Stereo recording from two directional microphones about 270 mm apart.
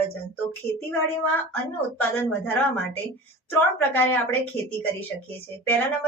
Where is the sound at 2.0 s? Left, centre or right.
Centre.